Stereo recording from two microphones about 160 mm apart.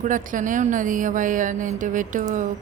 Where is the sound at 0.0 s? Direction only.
55° right (ahead or behind).